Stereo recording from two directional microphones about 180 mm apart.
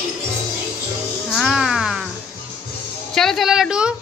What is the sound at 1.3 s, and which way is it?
Music, centre (ahead or behind).